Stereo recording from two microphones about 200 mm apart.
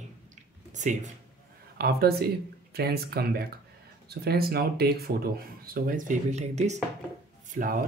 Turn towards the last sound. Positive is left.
turn(degrees=-45)  # may be behind; listen again after turning